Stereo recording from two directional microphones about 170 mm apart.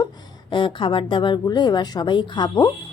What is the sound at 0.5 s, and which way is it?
A woman's voice, 30° left (ahead or behind).